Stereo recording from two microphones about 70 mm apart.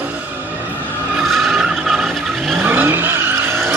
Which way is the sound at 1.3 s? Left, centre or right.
Centre.